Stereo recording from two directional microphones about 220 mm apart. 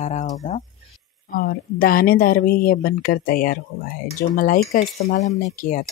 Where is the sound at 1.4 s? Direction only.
40° left (ahead or behind).